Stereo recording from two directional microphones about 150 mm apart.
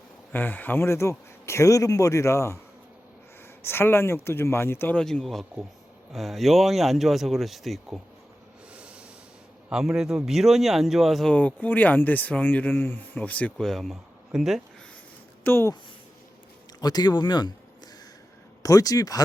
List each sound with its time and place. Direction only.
0.3 s a man's voice: 10° left (ahead or behind)
3.6 s speech: 15° left (ahead or behind); by 8.0 s centre (ahead or behind)
8.7 s snort: 5° right (ahead or behind)
9.6 s speech: 5° right (ahead or behind)
15.4 s speech: 15° left (ahead or behind)
16.8 s a man's voice: 25° left (ahead or behind)
18.6 s a man's voice: 25° left (ahead or behind)